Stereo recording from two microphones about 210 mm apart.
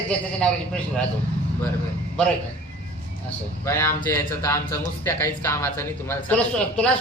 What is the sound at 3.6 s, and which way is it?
A man's voice, 10° left (ahead or behind).